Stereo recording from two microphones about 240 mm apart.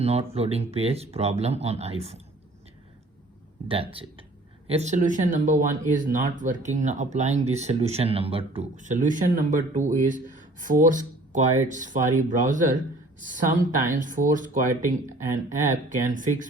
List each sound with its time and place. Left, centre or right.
0.0 s speech: right
3.7 s speech: right